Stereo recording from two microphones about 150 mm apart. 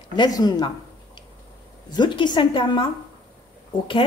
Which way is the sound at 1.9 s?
30° left (ahead or behind).